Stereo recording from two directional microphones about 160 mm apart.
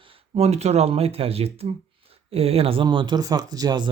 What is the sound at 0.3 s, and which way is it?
Speech, 40° right (ahead or behind).